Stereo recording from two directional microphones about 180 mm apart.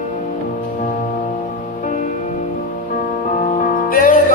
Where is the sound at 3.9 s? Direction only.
50° left (ahead or behind).